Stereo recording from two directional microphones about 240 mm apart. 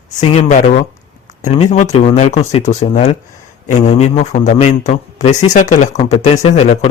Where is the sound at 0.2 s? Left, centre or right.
Left.